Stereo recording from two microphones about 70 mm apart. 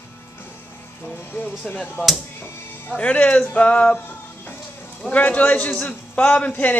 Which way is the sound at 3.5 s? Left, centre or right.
Centre.